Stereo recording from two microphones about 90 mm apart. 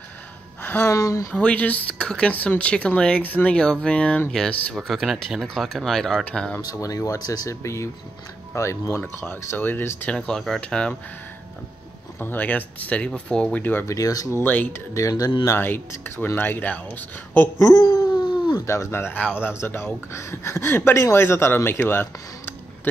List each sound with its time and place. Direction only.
0.6 s a sound: 20° left (ahead or behind)
0.8 s speech: 35° left (ahead or behind)
1.3 s speech: 15° left (ahead or behind)
6.6 s speech: 40° left (ahead or behind); by 10.1 s 20° left (ahead or behind)
10.1 s speech: 5° left (ahead or behind)
12.2 s speech: 20° left (ahead or behind)
13.8 s speech: 40° left (ahead or behind)
14.4 s speech: 20° left (ahead or behind)
15.0 s speech: 40° left (ahead or behind)
15.4 s speech: 25° left (ahead or behind)
17.7 s a sound: 50° left (ahead or behind)
18.7 s speech: 30° left (ahead or behind)